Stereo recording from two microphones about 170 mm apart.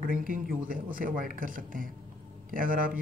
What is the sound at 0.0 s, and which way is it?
Speech, 55° right (ahead or behind).